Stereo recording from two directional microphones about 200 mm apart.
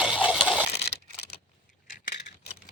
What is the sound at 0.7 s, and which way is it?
Tearing, 55° left (ahead or behind).